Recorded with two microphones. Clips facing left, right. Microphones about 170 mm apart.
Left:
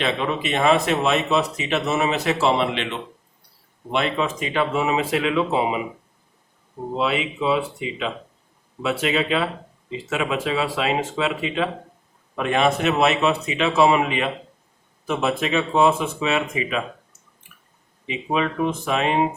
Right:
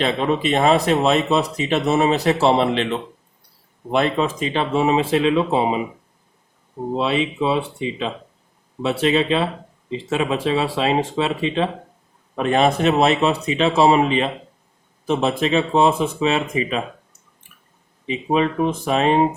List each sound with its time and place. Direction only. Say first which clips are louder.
0.0 s speech: right 4 dB; 35° right (ahead or behind)
6.9 s speech: right 3 dB; 30° right (ahead or behind)
18.0 s speech: right 4 dB; 35° right (ahead or behind)